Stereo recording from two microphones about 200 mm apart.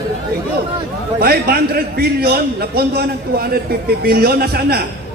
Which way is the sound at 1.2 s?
50° right (ahead or behind).